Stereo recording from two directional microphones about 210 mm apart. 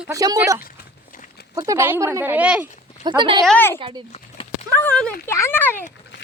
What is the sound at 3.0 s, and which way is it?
Speech, 20° right (ahead or behind).